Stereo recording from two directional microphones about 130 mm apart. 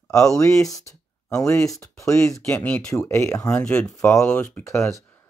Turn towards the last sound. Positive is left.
turn(degrees=15)  # may be behind; listen again after turning